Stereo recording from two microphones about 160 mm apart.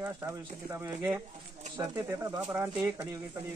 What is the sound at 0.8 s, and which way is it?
Speech, 10° right (ahead or behind).